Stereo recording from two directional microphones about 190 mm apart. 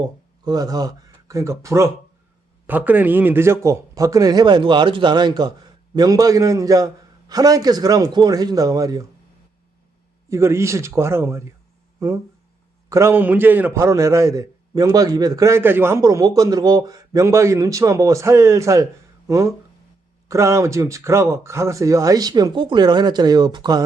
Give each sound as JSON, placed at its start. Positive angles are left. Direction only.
{"t": 0.4, "sound": "a man's voice", "side_deg": -20}
{"t": 10.2, "sound": "a man's voice", "side_deg": -15}